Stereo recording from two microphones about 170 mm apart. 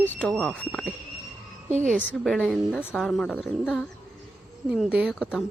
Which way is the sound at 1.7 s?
45° right (ahead or behind).